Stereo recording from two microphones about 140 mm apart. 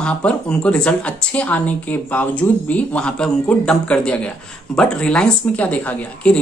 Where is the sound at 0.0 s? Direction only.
5° left (ahead or behind).